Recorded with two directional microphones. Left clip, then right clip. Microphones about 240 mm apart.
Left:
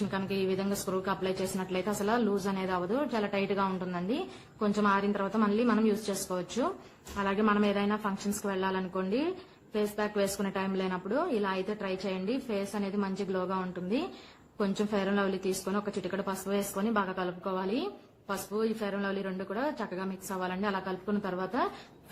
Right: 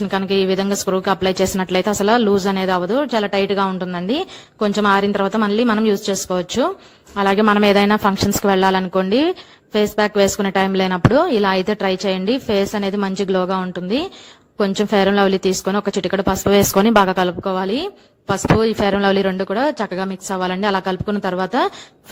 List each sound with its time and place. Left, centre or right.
0.1 s a woman's voice: right